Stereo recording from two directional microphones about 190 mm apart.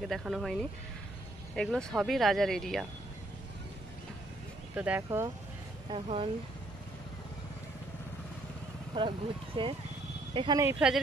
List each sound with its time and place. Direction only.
0.1 s speech: centre (ahead or behind)
4.7 s speech: 5° right (ahead or behind)
5.9 s speech: 30° right (ahead or behind)
8.9 s speech: 25° right (ahead or behind)
10.6 s speech: 10° right (ahead or behind)